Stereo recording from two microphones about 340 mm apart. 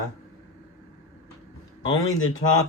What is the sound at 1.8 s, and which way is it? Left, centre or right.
Speech, left.